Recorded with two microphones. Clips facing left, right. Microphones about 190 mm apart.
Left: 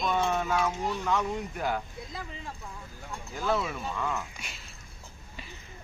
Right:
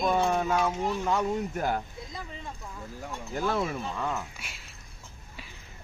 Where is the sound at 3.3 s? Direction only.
50° right (ahead or behind).